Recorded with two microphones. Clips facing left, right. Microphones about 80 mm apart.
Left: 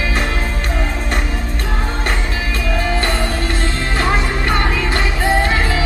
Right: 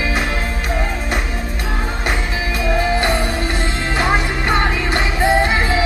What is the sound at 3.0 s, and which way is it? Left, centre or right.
Music, centre.